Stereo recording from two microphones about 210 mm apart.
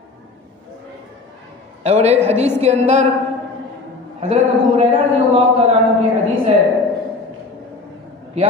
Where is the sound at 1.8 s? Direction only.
30° right (ahead or behind).